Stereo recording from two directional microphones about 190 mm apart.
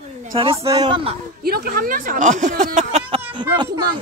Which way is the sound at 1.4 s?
50° right (ahead or behind).